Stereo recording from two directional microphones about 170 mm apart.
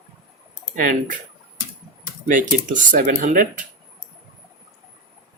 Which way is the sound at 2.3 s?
50° right (ahead or behind).